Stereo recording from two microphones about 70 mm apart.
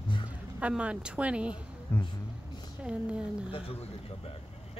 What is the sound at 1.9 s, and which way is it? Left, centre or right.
Speech, left.